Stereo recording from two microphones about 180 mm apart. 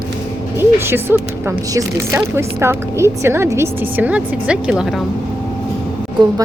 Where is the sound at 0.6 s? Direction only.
10° right (ahead or behind).